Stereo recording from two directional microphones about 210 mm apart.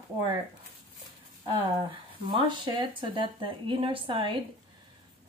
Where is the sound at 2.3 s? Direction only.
20° right (ahead or behind).